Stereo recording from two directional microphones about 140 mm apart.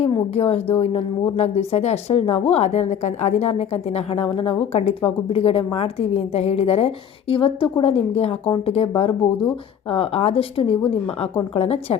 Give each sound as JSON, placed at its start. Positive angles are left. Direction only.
{"t": 0.1, "sound": "a woman's voice", "side_deg": 40}